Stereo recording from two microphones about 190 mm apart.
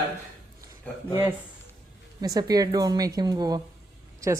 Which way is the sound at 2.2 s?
20° right (ahead or behind).